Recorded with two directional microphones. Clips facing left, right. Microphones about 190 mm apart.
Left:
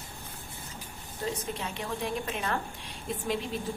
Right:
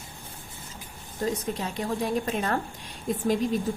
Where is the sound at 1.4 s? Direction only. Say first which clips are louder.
Right 5 dB; 40° right (ahead or behind).